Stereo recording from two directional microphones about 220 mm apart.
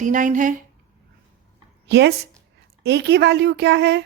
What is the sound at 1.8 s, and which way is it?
A woman's voice, 50° right (ahead or behind).